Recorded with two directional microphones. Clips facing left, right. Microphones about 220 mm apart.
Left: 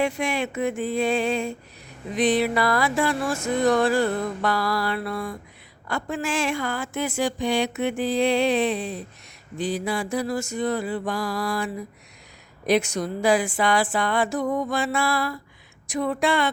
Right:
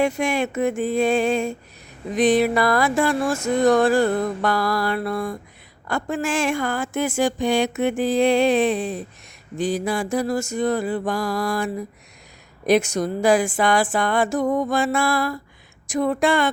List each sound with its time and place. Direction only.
0.0 s music: 45° right (ahead or behind)